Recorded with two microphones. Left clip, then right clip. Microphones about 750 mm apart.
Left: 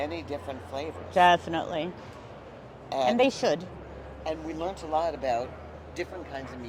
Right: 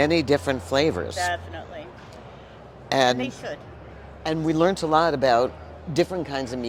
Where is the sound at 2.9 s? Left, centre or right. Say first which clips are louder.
Right 6 dB; right.